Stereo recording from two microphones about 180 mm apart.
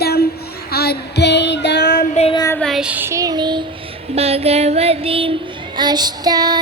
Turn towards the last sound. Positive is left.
turn(degrees=-20)  # may be behind; listen again after turning